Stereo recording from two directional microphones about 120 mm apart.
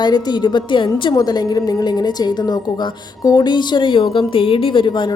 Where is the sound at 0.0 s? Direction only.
35° left (ahead or behind).